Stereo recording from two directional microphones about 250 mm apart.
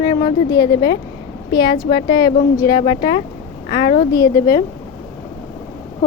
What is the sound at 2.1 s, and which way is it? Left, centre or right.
Speech, centre.